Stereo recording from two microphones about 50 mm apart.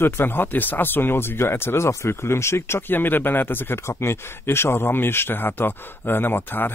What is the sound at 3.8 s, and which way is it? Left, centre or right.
Speech, left.